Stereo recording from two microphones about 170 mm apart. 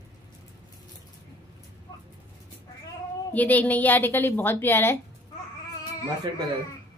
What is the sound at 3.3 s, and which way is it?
A woman's voice, 10° left (ahead or behind).